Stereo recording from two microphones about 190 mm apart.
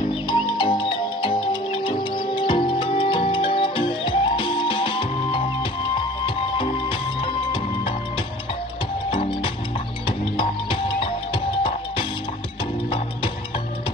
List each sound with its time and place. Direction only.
0.3 s music: 25° left (ahead or behind)
9.1 s music: 30° left (ahead or behind)